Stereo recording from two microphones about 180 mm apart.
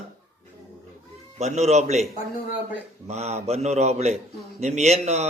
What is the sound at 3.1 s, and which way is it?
Speech, 40° right (ahead or behind).